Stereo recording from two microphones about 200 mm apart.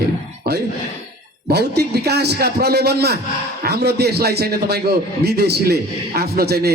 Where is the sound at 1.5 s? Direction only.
55° right (ahead or behind).